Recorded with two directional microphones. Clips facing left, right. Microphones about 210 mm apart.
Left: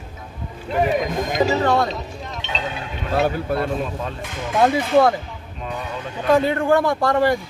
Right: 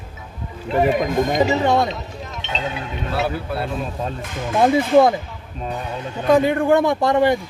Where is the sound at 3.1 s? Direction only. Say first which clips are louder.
Left 4 dB; 45° left (ahead or behind).